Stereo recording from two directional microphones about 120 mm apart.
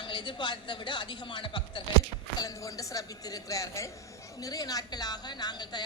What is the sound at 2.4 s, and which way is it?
A woman's voice, 30° left (ahead or behind).